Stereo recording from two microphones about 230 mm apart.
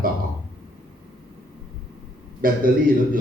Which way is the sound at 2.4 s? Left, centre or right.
Right.